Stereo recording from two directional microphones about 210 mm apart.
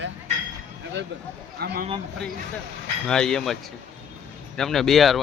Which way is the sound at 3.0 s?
5° left (ahead or behind).